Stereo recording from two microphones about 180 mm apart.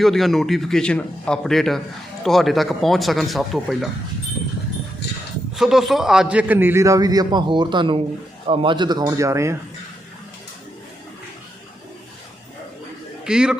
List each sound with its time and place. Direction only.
0.0 s a man's voice: centre (ahead or behind)
5.5 s a man's voice: centre (ahead or behind)
13.2 s a man's voice: 5° right (ahead or behind)